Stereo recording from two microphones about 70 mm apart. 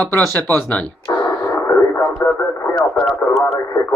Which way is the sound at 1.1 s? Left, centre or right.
Left.